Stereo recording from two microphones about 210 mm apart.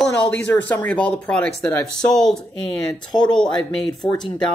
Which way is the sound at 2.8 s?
20° left (ahead or behind).